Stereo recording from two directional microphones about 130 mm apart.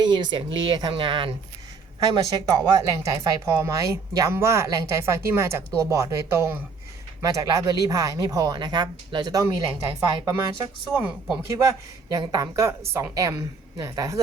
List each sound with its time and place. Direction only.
0.0 s speech: 35° right (ahead or behind)
2.5 s speech: 25° right (ahead or behind)
10.2 s speech: 15° right (ahead or behind)
11.5 s speech: 25° right (ahead or behind)